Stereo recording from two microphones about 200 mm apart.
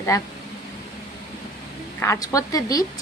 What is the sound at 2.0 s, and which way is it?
Speech, 15° left (ahead or behind).